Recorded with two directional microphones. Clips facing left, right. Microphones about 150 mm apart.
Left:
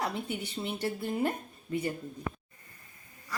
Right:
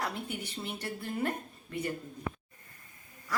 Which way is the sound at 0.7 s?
25° left (ahead or behind).